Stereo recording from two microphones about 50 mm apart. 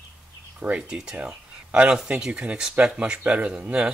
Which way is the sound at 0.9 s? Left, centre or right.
Centre.